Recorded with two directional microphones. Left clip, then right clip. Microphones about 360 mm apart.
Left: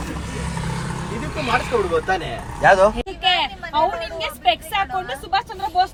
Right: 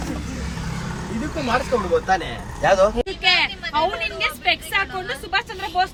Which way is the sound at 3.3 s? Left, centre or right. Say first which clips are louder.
Even; centre.